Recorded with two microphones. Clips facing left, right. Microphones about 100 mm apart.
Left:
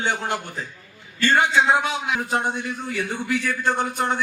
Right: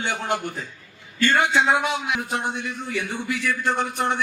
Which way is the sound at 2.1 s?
40° left (ahead or behind).